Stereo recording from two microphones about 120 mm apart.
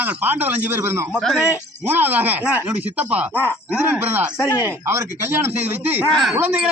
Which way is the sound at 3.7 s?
15° right (ahead or behind).